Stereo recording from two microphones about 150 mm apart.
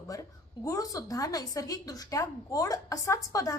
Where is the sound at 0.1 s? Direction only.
20° left (ahead or behind).